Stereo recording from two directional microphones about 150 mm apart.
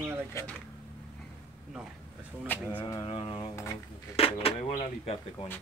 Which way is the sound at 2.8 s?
25° left (ahead or behind).